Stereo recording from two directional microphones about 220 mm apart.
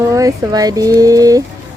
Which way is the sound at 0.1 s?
15° right (ahead or behind).